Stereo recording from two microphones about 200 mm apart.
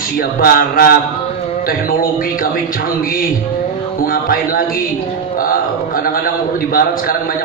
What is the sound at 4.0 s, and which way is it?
Speech, 45° left (ahead or behind).